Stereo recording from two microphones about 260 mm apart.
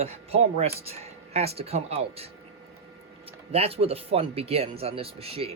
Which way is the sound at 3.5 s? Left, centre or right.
Right.